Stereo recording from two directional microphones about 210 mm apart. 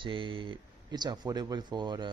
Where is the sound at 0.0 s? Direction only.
25° right (ahead or behind).